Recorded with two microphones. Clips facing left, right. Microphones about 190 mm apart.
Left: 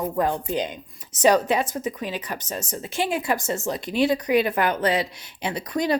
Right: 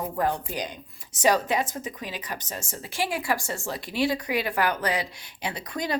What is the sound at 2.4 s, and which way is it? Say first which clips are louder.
A woman's voice: left 5 dB; 20° left (ahead or behind).